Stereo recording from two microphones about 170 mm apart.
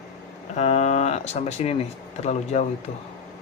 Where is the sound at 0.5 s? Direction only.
40° left (ahead or behind).